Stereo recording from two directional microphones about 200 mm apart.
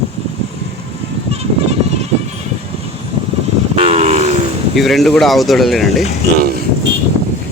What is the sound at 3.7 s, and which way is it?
Vehicle, 30° right (ahead or behind).